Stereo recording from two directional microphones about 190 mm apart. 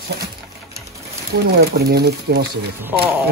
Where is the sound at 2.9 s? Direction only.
10° right (ahead or behind).